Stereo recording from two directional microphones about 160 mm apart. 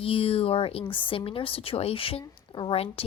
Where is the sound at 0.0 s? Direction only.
35° left (ahead or behind).